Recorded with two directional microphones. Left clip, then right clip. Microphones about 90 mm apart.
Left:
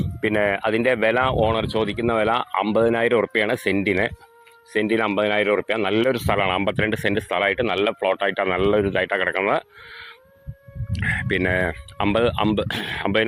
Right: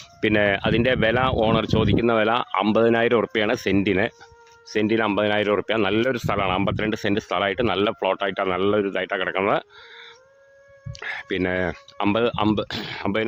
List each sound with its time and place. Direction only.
0.2 s speech: 80° right
0.6 s speech: 55° right (ahead or behind)
1.5 s speech: 70° right (ahead or behind); by 2.6 s 45° right (ahead or behind)
2.7 s speech: 60° right (ahead or behind)
6.0 s speech: 25° right (ahead or behind)
10.9 s speech: 30° right (ahead or behind)
12.6 s speech: 15° right (ahead or behind)